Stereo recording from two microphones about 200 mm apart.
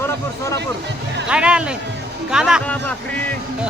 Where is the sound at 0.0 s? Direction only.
15° left (ahead or behind).